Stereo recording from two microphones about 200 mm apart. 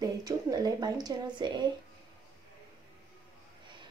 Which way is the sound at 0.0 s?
20° right (ahead or behind).